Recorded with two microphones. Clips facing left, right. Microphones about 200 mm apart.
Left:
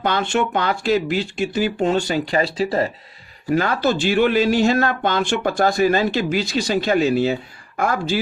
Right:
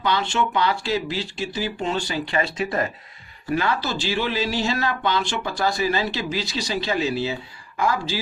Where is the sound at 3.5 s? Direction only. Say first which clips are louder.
Left 5 dB; 45° left (ahead or behind).